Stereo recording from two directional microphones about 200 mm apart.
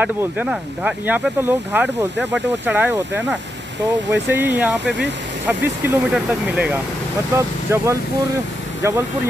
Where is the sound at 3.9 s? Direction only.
60° right (ahead or behind).